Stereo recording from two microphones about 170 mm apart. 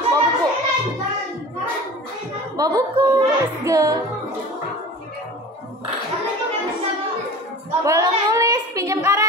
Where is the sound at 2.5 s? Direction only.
20° right (ahead or behind).